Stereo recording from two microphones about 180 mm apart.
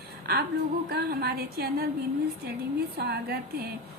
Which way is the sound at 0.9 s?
60° right (ahead or behind).